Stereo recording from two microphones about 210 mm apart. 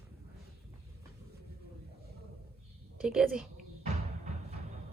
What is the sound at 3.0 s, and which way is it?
Speech, centre (ahead or behind).